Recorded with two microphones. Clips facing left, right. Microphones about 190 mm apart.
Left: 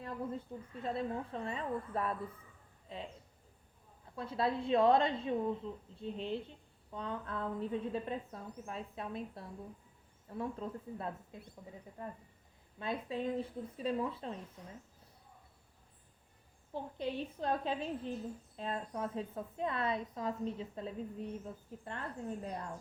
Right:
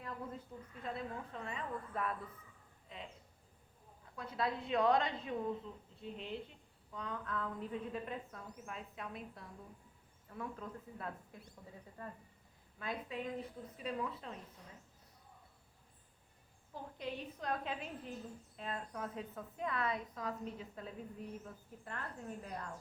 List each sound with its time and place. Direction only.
0.0 s a woman's voice: 30° left (ahead or behind)
4.1 s a woman's voice: 30° left (ahead or behind)
12.0 s speech: 15° left (ahead or behind)
12.8 s a woman's voice: 30° left (ahead or behind)
16.7 s a woman's voice: 30° left (ahead or behind)